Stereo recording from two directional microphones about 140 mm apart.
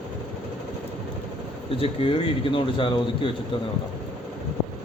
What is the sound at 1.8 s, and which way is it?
Speech, 40° left (ahead or behind).